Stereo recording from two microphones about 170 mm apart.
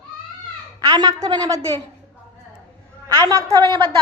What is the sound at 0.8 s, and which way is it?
Speech, 20° right (ahead or behind).